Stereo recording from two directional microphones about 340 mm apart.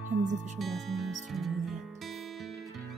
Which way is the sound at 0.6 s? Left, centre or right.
Centre.